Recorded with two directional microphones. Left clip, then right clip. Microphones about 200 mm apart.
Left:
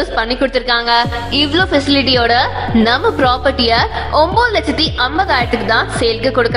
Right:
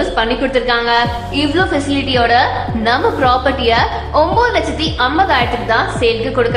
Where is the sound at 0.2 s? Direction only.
40° left (ahead or behind).